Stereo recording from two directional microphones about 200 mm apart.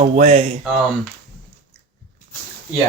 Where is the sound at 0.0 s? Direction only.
35° right (ahead or behind).